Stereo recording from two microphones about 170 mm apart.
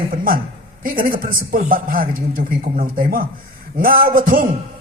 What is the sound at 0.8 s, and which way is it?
A man's voice, 55° right (ahead or behind).